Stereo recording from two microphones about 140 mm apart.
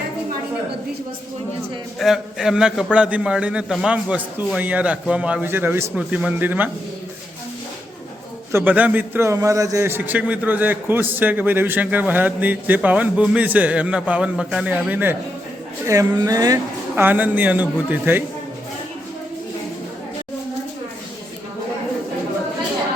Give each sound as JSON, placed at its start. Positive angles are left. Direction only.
{"t": 2.0, "sound": "a man's voice", "side_deg": -5}
{"t": 8.5, "sound": "a man's voice", "side_deg": -10}
{"t": 15.9, "sound": "speech", "side_deg": -25}
{"t": 16.9, "sound": "a man's voice", "side_deg": -15}